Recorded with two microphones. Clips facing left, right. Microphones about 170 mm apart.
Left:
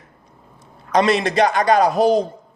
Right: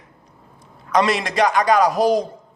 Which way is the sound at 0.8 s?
30° left (ahead or behind).